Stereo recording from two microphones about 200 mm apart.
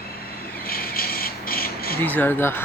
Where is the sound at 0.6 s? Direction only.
45° left (ahead or behind).